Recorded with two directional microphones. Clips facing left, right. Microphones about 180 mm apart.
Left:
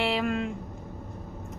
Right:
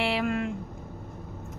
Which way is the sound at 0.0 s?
Centre (ahead or behind).